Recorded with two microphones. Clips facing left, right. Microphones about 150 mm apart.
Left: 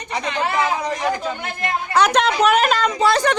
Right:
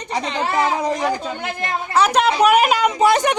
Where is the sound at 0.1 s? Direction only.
30° right (ahead or behind).